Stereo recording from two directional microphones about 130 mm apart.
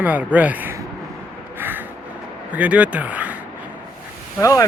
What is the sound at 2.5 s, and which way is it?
Speech, 10° right (ahead or behind).